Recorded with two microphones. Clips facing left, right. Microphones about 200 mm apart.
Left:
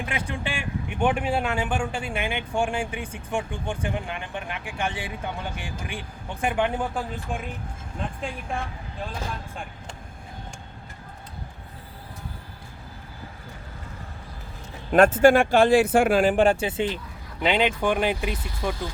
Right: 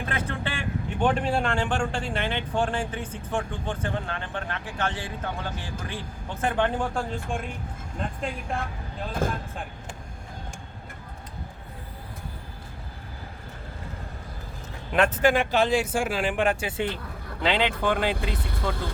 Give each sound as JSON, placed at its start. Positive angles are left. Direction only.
{"t": 0.0, "sound": "speech", "side_deg": 15}
{"t": 9.2, "sound": "speech", "side_deg": -50}
{"t": 14.9, "sound": "speech", "side_deg": 45}